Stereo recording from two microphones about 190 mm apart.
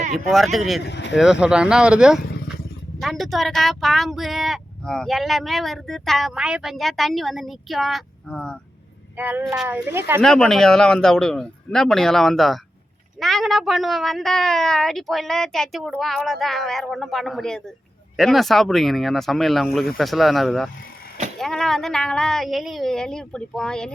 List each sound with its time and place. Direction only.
0.3 s speech: centre (ahead or behind)
0.9 s speech: 65° left (ahead or behind)
1.1 s speech: 5° right (ahead or behind)
9.1 s speech: 10° right (ahead or behind)
10.2 s speech: 5° left (ahead or behind)